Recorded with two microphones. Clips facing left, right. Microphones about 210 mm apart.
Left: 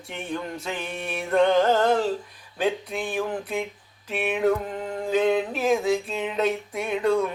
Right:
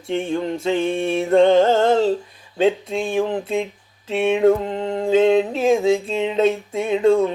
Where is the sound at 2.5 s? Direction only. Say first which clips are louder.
Right 7 dB; 25° right (ahead or behind).